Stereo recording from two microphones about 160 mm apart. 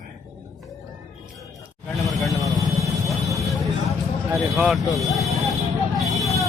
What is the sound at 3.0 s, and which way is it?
Vehicle, centre (ahead or behind).